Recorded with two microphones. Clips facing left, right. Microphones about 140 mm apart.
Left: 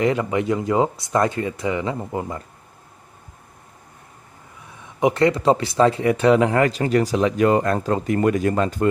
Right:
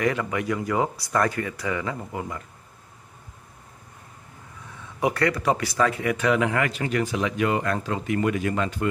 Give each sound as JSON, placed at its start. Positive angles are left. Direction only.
{"t": 0.0, "sound": "speech", "side_deg": 25}
{"t": 4.8, "sound": "speech", "side_deg": 20}